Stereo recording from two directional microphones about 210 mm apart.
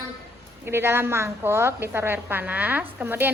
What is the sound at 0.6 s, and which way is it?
A woman's voice, 10° right (ahead or behind).